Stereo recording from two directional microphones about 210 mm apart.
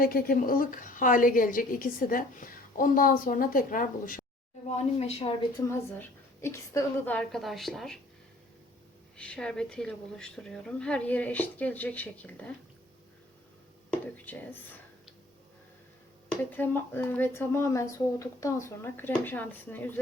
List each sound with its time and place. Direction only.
0.0 s a woman's voice: 45° left (ahead or behind)
4.9 s a woman's voice: 30° left (ahead or behind)
5.6 s a woman's voice: 15° left (ahead or behind)
9.1 s a woman's voice: 5° left (ahead or behind)
14.3 s speech: 10° left (ahead or behind)
16.3 s speech: 10° left (ahead or behind)